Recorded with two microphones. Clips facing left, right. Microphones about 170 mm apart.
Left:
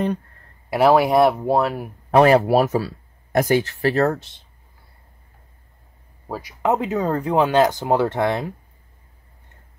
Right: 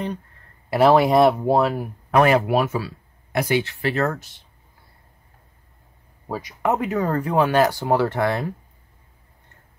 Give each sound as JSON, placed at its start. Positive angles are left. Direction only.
{"t": 0.7, "sound": "speech", "side_deg": 15}
{"t": 2.0, "sound": "speech", "side_deg": 35}
{"t": 6.2, "sound": "speech", "side_deg": 5}
{"t": 6.6, "sound": "speech", "side_deg": 20}